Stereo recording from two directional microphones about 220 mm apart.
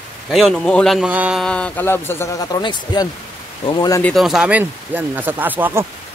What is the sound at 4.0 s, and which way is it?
Speech, 5° left (ahead or behind).